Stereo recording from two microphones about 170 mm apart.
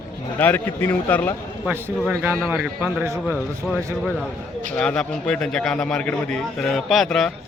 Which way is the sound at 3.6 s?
5° left (ahead or behind).